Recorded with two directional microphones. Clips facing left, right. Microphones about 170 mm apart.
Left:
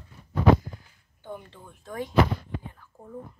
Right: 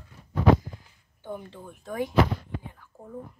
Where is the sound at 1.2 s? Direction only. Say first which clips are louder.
Right 3 dB; 10° right (ahead or behind).